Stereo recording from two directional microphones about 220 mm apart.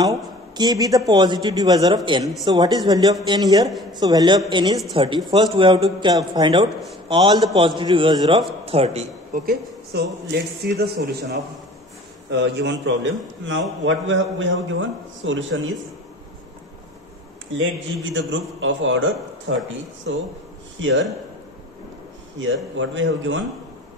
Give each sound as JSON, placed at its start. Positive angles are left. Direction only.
{"t": 0.0, "sound": "a man's voice", "side_deg": -15}
{"t": 9.9, "sound": "a man's voice", "side_deg": -50}
{"t": 17.6, "sound": "a man's voice", "side_deg": -60}
{"t": 22.4, "sound": "a man's voice", "side_deg": -60}